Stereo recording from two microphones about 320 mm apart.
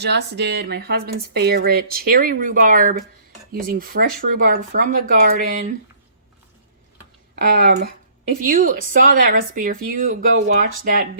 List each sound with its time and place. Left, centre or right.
0.0 s speech: right
7.3 s speech: right